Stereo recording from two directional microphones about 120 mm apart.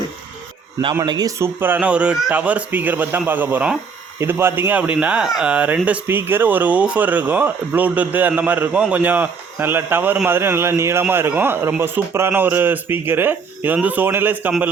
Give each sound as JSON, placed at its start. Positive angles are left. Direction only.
{"t": 1.0, "sound": "a man's voice", "side_deg": -35}
{"t": 1.4, "sound": "speech", "side_deg": -15}